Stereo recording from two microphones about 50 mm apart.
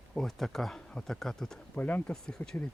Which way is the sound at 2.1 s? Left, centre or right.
Centre.